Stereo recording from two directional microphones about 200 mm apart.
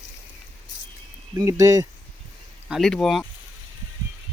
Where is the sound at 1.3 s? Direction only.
15° right (ahead or behind).